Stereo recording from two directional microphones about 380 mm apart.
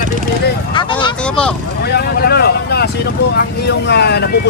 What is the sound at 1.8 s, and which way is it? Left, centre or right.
Speech, left.